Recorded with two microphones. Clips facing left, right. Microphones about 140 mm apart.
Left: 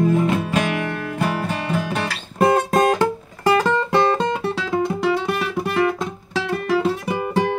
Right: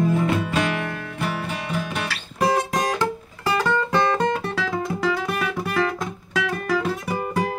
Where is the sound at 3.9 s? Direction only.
30° left (ahead or behind).